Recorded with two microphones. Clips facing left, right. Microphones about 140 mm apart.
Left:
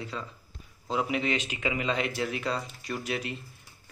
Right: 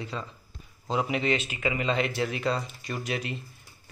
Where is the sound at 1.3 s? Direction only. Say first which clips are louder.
Right 2 dB; 15° left (ahead or behind).